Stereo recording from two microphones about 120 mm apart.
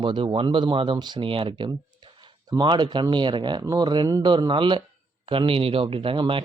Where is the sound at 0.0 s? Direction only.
45° right (ahead or behind).